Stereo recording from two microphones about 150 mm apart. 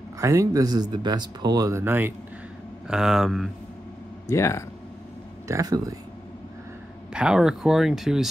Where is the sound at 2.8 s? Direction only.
5° right (ahead or behind).